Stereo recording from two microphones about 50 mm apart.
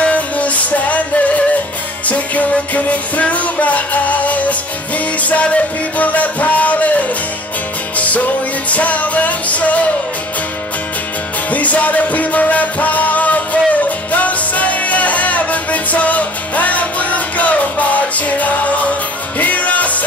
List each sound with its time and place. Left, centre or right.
0.0 s music: left
8.6 s music: left
11.5 s music: left